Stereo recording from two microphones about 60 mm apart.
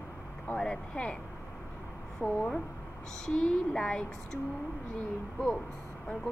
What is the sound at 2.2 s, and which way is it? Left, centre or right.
Speech, left.